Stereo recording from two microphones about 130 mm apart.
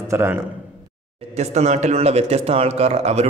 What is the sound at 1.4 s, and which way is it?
Speech, 60° right (ahead or behind).